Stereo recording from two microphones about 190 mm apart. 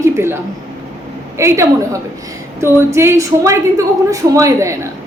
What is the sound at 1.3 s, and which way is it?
A woman's voice, 15° right (ahead or behind).